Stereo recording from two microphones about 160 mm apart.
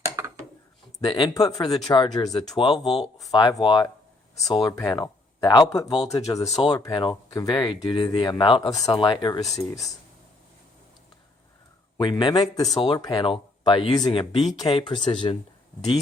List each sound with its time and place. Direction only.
0.9 s speech: 30° left (ahead or behind)
11.9 s speech: 30° left (ahead or behind)